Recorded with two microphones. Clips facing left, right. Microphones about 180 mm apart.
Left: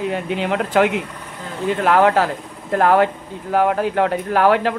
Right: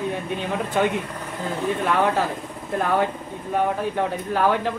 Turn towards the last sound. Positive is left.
turn(degrees=85)